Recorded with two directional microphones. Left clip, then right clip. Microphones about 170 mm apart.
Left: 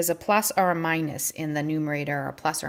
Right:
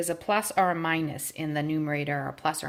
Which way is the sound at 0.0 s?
30° left (ahead or behind).